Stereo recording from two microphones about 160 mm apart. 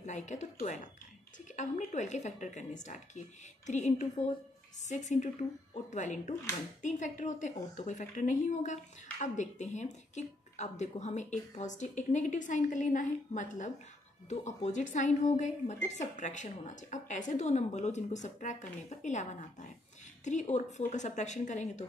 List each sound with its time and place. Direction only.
0.0 s speech: 50° left (ahead or behind)